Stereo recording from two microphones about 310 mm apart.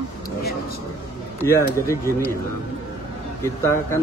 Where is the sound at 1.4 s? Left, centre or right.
Centre.